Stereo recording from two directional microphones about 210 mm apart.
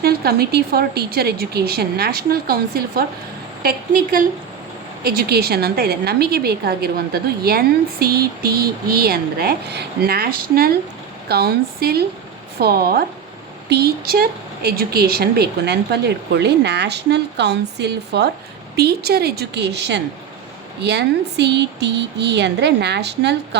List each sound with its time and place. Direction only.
0.0 s a woman's voice: 50° right (ahead or behind)